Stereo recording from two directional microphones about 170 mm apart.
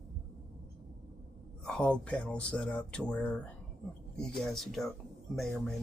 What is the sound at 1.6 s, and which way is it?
Speech, 5° left (ahead or behind).